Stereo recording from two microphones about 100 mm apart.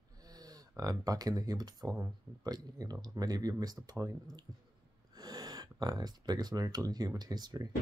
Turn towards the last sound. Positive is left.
turn(degrees=-40)  # may be behind; listen again after turning